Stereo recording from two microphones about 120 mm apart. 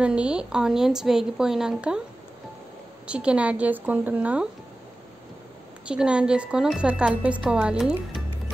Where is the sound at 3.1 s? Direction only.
10° right (ahead or behind).